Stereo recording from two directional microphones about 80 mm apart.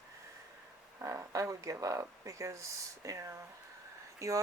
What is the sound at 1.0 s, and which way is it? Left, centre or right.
Speech, right.